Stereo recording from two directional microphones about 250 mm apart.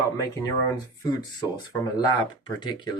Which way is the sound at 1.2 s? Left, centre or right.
Centre.